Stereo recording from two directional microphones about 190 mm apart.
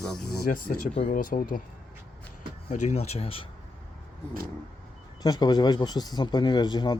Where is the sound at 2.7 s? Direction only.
40° left (ahead or behind).